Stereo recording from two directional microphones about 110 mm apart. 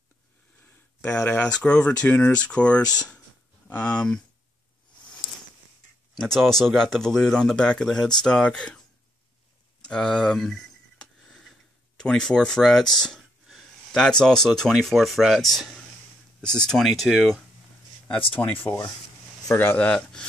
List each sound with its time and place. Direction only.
1.0 s speech: 10° left (ahead or behind)
6.1 s speech: 5° left (ahead or behind)
9.8 s a sound: 10° left (ahead or behind)
12.0 s speech: 5° left (ahead or behind)
18.3 s speech: 15° left (ahead or behind)
19.9 s speech: 10° left (ahead or behind)